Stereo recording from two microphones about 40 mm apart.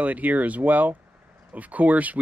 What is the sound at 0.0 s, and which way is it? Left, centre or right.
Speech, right.